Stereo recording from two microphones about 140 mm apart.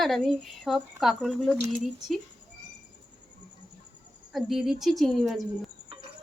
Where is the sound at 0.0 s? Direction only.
Centre (ahead or behind).